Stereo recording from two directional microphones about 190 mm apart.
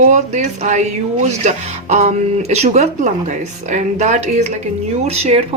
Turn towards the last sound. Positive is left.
turn(degrees=-35)  # may be behind; listen again after turning